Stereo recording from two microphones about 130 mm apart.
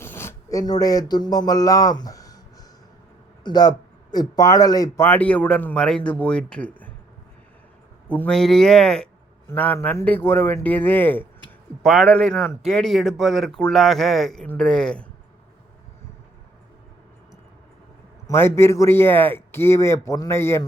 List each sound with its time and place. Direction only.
0.0 s a sound: 20° left (ahead or behind)
0.6 s speech: 30° left (ahead or behind)
5.0 s speech: 10° left (ahead or behind)
8.0 s a man's voice: 10° left (ahead or behind)
9.5 s speech: 15° left (ahead or behind)
11.8 s a man's voice: centre (ahead or behind)
18.3 s a man's voice: 20° left (ahead or behind)